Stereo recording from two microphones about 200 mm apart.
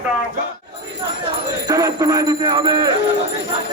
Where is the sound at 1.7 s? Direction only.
20° right (ahead or behind).